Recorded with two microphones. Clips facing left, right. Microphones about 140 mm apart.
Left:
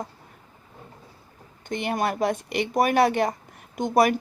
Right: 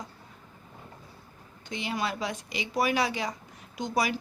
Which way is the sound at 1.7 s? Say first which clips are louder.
Left 6 dB; 55° left (ahead or behind).